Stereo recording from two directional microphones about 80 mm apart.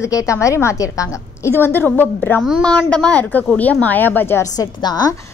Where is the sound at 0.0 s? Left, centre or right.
Left.